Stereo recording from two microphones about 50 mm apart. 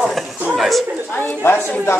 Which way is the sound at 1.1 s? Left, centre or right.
Left.